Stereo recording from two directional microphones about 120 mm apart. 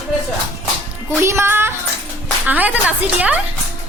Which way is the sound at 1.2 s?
20° right (ahead or behind).